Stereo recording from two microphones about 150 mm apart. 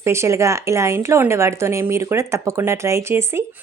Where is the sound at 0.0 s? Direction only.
20° right (ahead or behind).